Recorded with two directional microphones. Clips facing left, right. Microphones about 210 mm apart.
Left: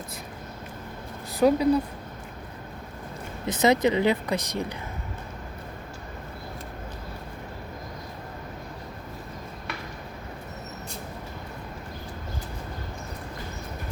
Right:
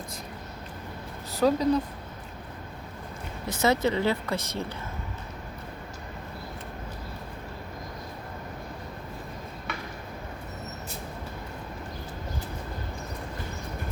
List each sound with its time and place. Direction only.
1.3 s speech: 15° left (ahead or behind)
3.4 s speech: 20° left (ahead or behind)